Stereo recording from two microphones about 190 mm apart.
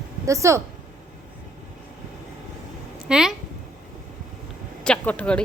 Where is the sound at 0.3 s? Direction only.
15° right (ahead or behind).